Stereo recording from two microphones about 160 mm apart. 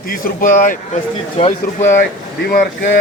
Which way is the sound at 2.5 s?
60° left (ahead or behind).